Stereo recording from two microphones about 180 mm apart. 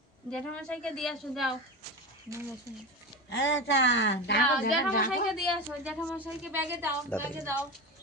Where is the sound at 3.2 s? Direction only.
85° left.